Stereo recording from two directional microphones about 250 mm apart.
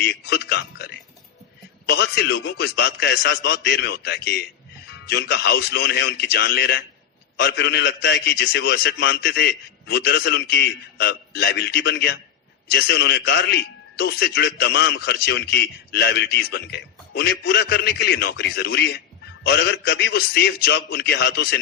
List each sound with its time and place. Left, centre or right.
0.0 s a man's voice: left